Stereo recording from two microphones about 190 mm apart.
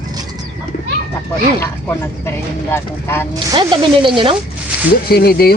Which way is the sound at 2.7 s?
10° left (ahead or behind).